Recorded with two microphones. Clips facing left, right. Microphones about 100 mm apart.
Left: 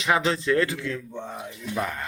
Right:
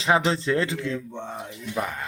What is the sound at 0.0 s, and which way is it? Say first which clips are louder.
A man's voice: right 1 dB; 30° right (ahead or behind).